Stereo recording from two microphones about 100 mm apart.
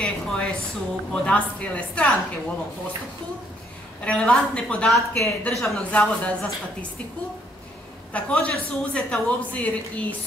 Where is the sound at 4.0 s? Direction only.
10° left (ahead or behind).